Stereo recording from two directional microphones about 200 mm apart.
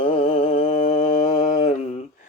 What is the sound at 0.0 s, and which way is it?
Mantra, 25° left (ahead or behind).